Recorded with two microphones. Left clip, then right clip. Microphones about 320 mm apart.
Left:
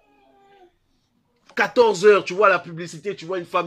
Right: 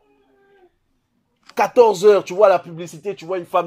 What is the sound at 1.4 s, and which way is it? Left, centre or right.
Speech, centre.